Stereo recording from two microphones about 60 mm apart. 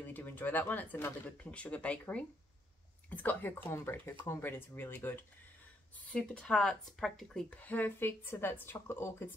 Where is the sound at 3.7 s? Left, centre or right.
Left.